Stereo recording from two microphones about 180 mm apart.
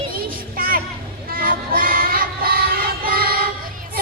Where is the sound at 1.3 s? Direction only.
50° right (ahead or behind).